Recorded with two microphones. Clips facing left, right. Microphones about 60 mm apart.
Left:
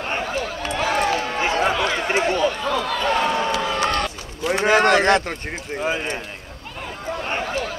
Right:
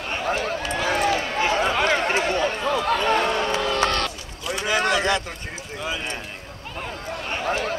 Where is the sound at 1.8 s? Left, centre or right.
Right.